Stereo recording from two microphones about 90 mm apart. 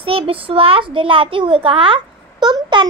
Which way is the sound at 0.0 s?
90° right.